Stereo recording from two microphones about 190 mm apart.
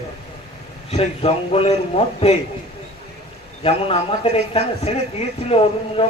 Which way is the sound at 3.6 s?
30° left (ahead or behind).